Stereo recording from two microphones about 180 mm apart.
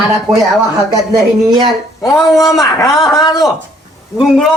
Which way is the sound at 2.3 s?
Centre (ahead or behind).